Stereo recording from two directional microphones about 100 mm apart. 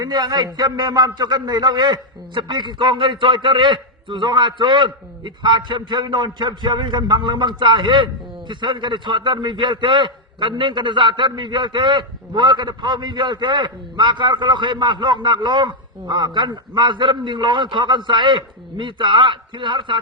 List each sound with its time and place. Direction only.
0.0 s a man's voice: 45° right (ahead or behind)